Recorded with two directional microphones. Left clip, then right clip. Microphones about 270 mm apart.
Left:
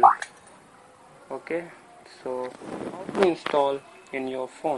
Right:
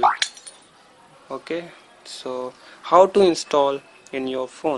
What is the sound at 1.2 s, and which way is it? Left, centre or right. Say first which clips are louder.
Speech: right 2 dB; right.